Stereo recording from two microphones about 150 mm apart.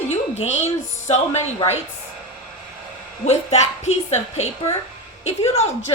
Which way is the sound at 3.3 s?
50° left (ahead or behind).